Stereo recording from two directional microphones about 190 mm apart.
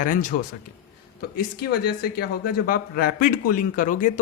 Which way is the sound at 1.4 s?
50° left (ahead or behind).